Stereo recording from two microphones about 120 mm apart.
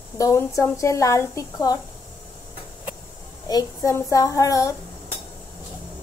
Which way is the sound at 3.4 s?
30° left (ahead or behind).